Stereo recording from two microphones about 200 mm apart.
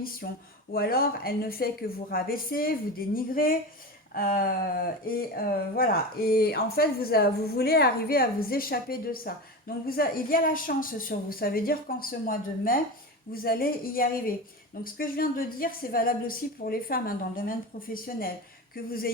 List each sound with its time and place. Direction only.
0.0 s speech: 45° left (ahead or behind)